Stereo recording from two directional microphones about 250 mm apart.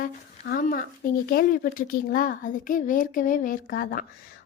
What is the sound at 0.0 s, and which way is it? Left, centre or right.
A woman's voice, left.